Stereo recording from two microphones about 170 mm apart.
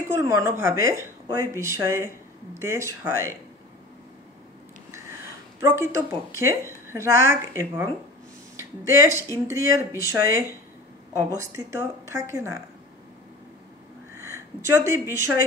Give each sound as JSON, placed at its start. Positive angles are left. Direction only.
{"t": 0.2, "sound": "speech", "side_deg": -15}
{"t": 5.6, "sound": "speech", "side_deg": -15}
{"t": 11.3, "sound": "speech", "side_deg": -15}
{"t": 14.1, "sound": "speech", "side_deg": -15}